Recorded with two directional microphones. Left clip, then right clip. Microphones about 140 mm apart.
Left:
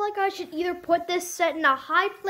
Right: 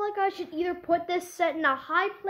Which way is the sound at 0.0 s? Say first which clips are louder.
Left 2 dB; 10° left (ahead or behind).